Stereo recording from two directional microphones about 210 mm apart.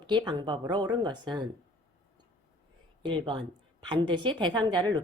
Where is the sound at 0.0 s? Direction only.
20° right (ahead or behind).